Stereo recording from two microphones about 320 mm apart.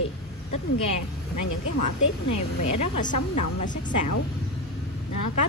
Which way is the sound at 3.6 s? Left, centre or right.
Left.